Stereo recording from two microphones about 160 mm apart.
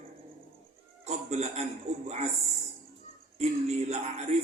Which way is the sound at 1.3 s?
40° right (ahead or behind).